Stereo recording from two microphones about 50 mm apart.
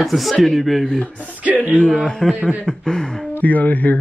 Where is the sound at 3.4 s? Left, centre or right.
Left.